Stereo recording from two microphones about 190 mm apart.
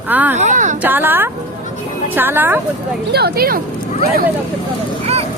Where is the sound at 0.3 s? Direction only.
40° right (ahead or behind).